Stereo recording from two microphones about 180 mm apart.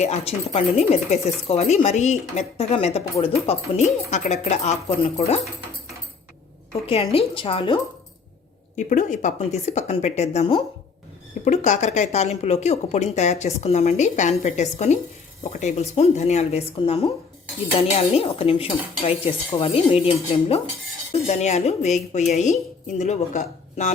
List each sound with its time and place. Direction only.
0.0 s speech: 35° left (ahead or behind)
6.8 s speech: 30° left (ahead or behind)
8.7 s speech: 45° left (ahead or behind)